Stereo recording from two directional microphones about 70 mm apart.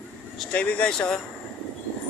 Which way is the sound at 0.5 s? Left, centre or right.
Centre.